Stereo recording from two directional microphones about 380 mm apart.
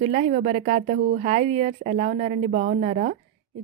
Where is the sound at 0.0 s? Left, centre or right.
Centre.